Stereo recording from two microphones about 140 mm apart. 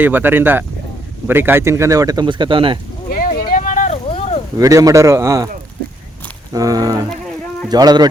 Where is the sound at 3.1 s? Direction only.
90° left; by 4.0 s 60° left (ahead or behind).